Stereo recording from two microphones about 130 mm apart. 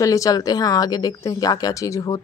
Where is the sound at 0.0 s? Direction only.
25° left (ahead or behind).